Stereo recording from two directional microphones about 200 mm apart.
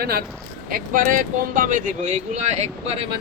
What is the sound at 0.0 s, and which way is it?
Speech, 50° right (ahead or behind).